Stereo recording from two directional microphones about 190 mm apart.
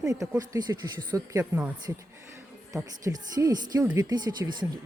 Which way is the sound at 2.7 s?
20° right (ahead or behind).